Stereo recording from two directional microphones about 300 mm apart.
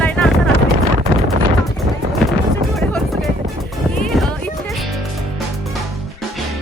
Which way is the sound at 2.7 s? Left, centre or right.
Centre.